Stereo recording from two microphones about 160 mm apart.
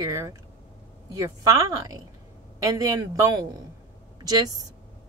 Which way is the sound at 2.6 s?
20° right (ahead or behind).